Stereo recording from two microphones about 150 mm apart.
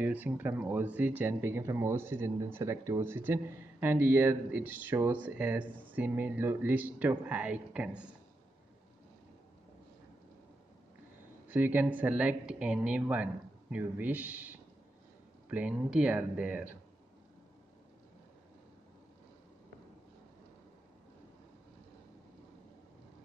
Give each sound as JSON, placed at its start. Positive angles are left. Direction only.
{"t": 0.0, "sound": "speech", "side_deg": -10}
{"t": 11.4, "sound": "speech", "side_deg": -10}